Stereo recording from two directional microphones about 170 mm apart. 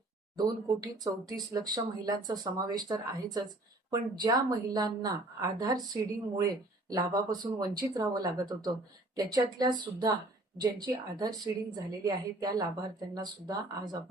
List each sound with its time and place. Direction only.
0.3 s speech: 20° right (ahead or behind)